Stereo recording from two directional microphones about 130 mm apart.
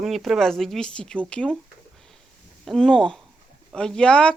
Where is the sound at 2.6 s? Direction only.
5° left (ahead or behind).